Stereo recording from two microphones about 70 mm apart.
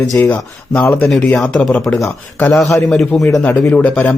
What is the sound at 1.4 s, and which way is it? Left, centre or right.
Speech, centre.